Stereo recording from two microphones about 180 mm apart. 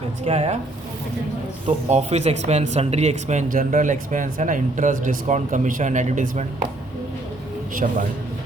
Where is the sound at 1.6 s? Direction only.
40° right (ahead or behind).